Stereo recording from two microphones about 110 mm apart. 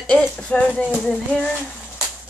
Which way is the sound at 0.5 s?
15° left (ahead or behind).